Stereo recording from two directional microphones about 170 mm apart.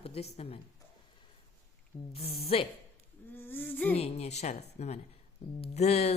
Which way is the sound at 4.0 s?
40° left (ahead or behind).